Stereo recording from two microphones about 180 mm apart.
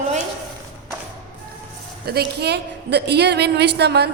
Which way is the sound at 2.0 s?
65° right (ahead or behind).